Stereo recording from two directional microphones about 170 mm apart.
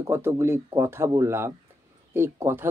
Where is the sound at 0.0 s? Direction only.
15° right (ahead or behind).